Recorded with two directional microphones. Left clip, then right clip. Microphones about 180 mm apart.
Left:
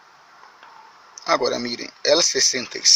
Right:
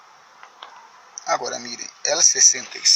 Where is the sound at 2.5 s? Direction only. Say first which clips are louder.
Left 1 dB; 55° left (ahead or behind).